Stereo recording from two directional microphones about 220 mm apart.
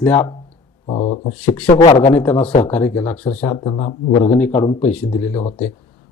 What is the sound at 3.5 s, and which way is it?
Speech, 20° left (ahead or behind).